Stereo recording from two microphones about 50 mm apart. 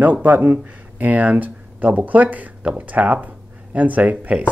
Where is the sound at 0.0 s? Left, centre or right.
Right.